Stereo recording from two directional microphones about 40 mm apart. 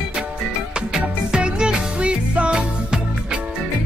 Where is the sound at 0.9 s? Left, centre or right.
Right.